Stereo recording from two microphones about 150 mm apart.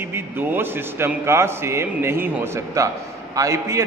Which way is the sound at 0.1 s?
15° right (ahead or behind).